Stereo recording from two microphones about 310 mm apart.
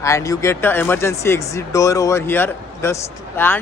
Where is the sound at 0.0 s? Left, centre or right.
Centre.